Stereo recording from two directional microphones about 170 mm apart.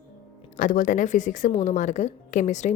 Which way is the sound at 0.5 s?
50° left (ahead or behind).